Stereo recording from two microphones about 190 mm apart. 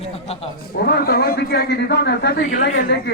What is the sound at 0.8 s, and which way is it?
A woman's voice, 55° left (ahead or behind).